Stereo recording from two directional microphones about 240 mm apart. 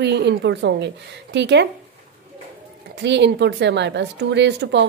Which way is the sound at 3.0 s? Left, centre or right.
Right.